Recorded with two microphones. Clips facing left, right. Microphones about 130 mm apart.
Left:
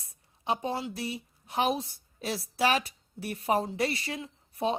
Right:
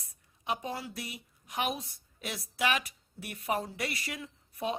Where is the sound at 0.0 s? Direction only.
30° left (ahead or behind).